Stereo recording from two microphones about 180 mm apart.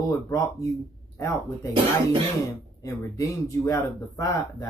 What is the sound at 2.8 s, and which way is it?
Speech, 20° left (ahead or behind).